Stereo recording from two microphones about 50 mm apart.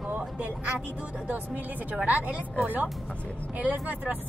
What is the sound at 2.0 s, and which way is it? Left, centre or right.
Speech, right.